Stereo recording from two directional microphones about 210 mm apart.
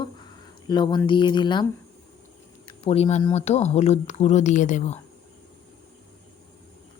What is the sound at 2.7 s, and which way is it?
Speech, 30° left (ahead or behind).